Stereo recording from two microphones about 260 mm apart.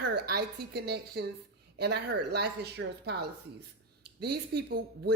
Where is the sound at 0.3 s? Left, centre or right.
Right.